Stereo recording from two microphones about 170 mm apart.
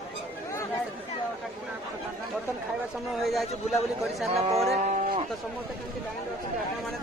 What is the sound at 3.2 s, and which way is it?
Speech, centre (ahead or behind).